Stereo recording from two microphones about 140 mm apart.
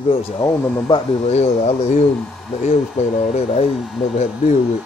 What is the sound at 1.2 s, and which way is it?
Speech, 50° left (ahead or behind).